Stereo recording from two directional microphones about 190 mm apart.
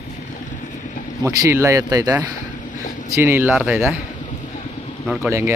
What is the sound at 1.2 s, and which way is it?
Speech, 15° right (ahead or behind).